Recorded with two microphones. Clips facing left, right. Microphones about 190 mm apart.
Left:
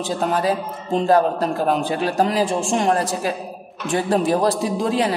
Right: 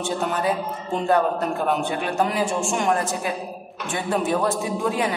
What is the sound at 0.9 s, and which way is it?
A man's voice, 35° left (ahead or behind).